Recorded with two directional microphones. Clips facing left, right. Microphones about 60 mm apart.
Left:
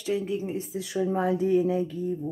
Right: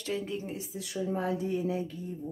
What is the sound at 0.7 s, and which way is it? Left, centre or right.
Speech, left.